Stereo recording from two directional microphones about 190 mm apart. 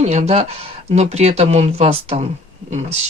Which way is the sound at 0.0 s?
35° right (ahead or behind).